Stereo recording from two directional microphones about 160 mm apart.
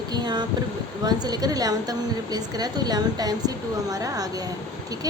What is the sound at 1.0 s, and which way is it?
Speech, 25° right (ahead or behind).